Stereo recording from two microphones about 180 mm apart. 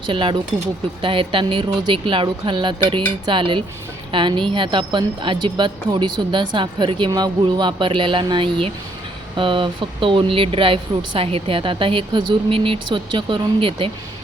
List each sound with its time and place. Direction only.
0.1 s speech: 30° right (ahead or behind)